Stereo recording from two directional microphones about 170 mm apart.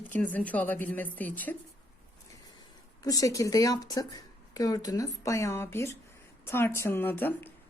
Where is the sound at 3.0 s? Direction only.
20° left (ahead or behind).